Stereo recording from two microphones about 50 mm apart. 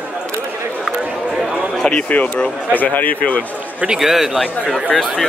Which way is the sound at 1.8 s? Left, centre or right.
Left.